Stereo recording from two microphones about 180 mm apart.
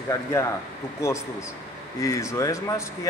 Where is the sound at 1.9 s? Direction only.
15° left (ahead or behind).